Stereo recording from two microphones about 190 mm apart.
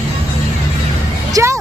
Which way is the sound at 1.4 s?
15° right (ahead or behind).